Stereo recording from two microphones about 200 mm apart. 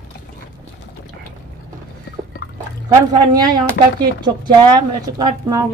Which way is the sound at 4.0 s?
20° right (ahead or behind).